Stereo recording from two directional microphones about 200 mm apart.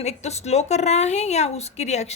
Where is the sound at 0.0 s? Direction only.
35° left (ahead or behind).